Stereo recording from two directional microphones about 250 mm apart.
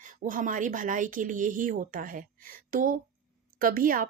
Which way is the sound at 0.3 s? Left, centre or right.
Right.